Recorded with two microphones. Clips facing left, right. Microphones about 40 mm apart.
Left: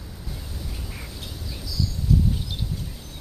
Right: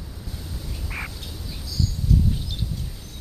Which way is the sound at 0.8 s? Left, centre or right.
Right.